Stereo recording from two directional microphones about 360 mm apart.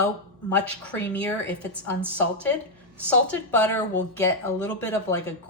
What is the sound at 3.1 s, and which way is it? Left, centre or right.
A woman's voice, centre.